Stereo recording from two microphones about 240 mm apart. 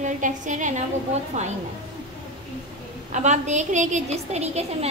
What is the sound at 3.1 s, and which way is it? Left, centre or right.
A woman's voice, right.